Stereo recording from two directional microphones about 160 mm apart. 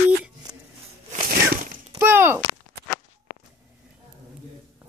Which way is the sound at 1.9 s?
15° right (ahead or behind).